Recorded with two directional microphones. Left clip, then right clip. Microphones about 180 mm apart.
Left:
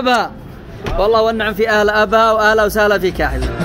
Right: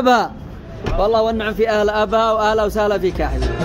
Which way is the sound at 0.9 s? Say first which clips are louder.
Left 3 dB; 5° right (ahead or behind).